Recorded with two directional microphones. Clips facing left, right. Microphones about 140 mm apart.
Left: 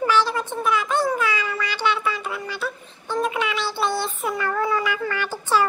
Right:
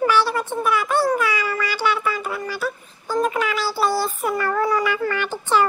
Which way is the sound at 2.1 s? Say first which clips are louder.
Right 2 dB; 50° right (ahead or behind).